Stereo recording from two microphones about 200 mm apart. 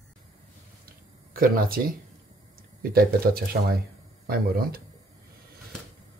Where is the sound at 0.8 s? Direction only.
45° right (ahead or behind).